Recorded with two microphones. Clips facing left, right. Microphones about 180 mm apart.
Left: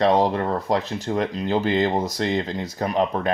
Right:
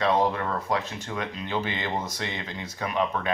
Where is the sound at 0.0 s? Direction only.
40° left (ahead or behind).